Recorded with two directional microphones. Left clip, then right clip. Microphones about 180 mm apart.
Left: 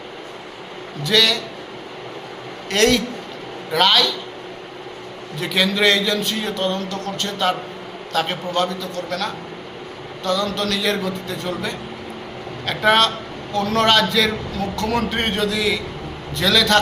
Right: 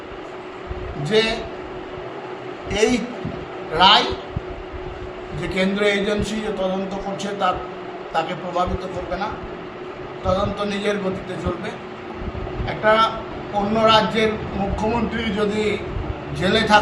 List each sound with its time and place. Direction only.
2.6 s a man's voice: 10° right (ahead or behind)
5.5 s a man's voice: 5° right (ahead or behind)
12.6 s a man's voice: 5° right (ahead or behind)